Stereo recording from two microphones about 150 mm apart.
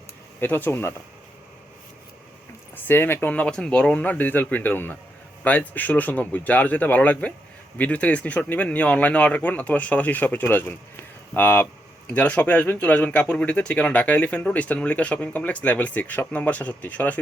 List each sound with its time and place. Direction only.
0.3 s speech: 10° left (ahead or behind)
2.7 s speech: 15° left (ahead or behind)